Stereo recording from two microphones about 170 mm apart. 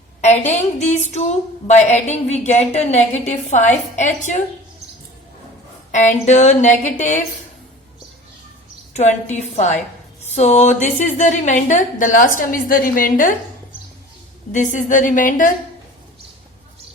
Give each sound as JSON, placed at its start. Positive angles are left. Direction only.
{"t": 0.2, "sound": "a woman's voice", "side_deg": 40}
{"t": 6.2, "sound": "a woman's voice", "side_deg": 45}
{"t": 8.9, "sound": "a woman's voice", "side_deg": 40}
{"t": 14.5, "sound": "a woman's voice", "side_deg": 45}